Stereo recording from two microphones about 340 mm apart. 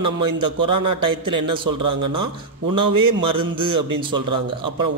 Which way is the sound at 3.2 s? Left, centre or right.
Centre.